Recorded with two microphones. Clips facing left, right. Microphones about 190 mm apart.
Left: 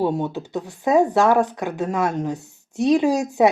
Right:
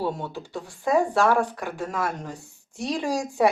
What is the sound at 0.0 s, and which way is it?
A woman's voice, 20° left (ahead or behind).